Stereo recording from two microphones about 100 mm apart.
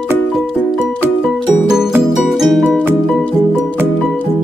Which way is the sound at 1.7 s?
5° right (ahead or behind).